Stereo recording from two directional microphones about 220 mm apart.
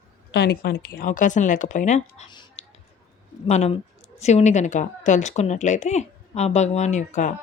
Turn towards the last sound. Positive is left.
turn(degrees=35)  # may be behind; listen again after turning